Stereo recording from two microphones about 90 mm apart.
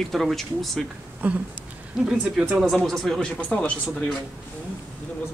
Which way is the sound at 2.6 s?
Centre (ahead or behind).